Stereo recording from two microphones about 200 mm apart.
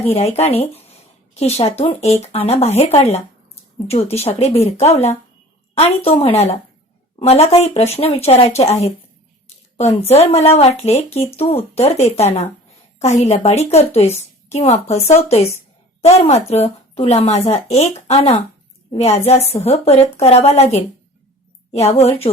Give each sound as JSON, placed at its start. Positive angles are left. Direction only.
{"t": 0.0, "sound": "a woman's voice", "side_deg": 30}